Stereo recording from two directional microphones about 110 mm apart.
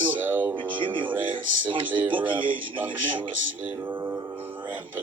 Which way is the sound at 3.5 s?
15° right (ahead or behind).